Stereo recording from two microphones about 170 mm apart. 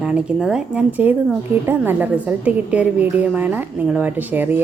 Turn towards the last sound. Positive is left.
turn(degrees=-10)  # may be behind; listen again after turning